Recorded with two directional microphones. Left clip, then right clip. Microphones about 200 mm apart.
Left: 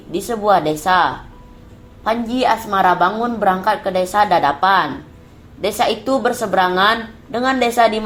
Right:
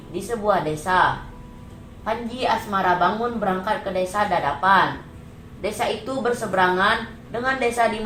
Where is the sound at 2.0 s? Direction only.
50° left (ahead or behind).